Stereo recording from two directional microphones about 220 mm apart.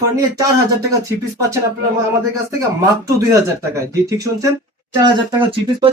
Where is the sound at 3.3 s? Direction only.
15° right (ahead or behind).